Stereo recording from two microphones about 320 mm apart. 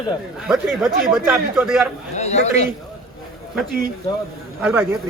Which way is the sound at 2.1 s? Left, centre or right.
Left.